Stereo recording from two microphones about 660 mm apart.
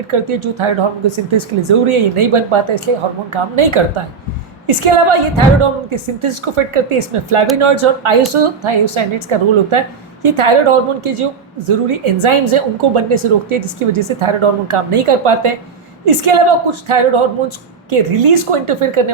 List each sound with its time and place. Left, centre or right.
0.1 s a woman's voice: right